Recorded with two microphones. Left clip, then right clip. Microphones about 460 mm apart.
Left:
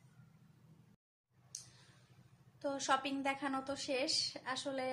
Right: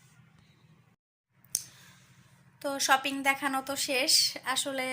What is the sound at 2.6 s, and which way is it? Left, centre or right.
Speech, left.